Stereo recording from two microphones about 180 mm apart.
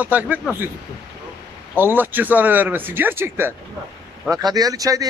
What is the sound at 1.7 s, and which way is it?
Speech, 10° right (ahead or behind).